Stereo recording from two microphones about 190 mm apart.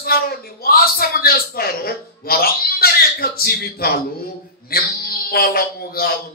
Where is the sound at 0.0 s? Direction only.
50° left (ahead or behind).